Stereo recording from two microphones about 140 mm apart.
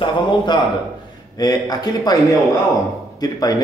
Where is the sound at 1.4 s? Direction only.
30° left (ahead or behind).